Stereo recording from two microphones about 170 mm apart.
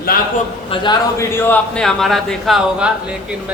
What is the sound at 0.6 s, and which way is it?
Speech, 30° left (ahead or behind).